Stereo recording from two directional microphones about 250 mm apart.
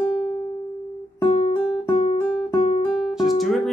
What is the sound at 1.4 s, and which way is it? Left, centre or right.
Music, left.